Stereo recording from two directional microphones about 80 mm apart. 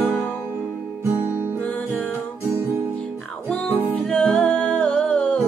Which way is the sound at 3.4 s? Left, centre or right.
Centre.